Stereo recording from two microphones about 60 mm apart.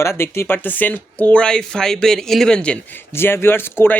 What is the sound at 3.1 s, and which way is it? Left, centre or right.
Speech, left.